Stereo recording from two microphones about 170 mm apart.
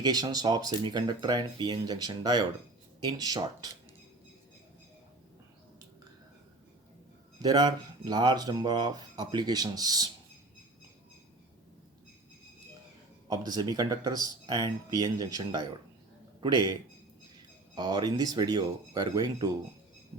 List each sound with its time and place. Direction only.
0.0 s speech: 20° right (ahead or behind)
7.4 s speech: 25° right (ahead or behind)
13.2 s speech: 25° right (ahead or behind)
17.7 s speech: 25° right (ahead or behind)